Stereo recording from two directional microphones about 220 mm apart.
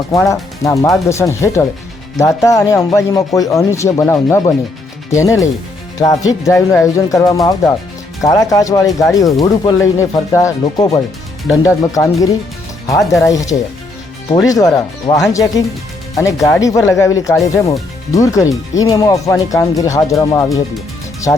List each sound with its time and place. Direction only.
0.1 s speech: 15° left (ahead or behind)